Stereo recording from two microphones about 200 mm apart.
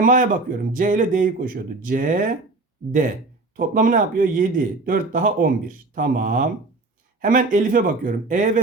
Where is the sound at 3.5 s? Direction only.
45° right (ahead or behind).